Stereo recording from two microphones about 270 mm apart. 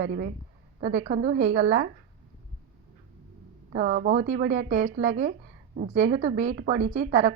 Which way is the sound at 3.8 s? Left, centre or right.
Right.